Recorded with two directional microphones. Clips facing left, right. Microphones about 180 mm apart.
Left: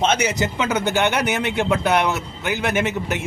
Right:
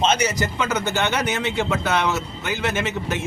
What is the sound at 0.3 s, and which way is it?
A man's voice, 20° left (ahead or behind).